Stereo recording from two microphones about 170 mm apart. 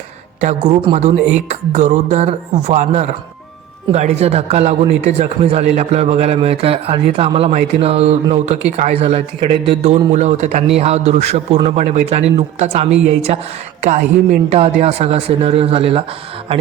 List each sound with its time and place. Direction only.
0.4 s a man's voice: 45° right (ahead or behind)